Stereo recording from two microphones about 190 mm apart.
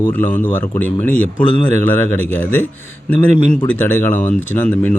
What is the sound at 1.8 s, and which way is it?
Speech, 10° left (ahead or behind).